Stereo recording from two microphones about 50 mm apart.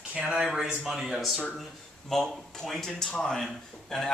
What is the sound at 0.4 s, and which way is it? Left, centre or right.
A man's voice, centre.